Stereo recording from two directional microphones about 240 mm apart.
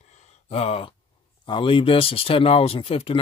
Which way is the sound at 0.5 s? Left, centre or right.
Left.